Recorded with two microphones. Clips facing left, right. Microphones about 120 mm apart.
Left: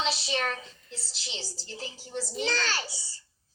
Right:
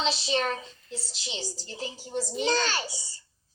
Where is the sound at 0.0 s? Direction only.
25° right (ahead or behind).